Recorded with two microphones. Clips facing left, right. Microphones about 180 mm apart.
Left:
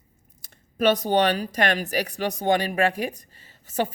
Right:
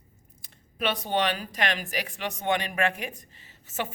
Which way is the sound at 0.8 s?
40° left (ahead or behind).